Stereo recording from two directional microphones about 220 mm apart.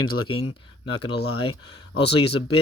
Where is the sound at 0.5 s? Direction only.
20° left (ahead or behind).